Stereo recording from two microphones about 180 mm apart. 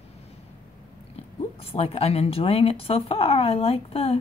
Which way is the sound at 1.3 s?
35° left (ahead or behind).